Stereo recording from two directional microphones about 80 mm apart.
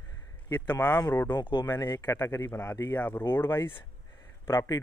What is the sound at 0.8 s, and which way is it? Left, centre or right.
Speech, left.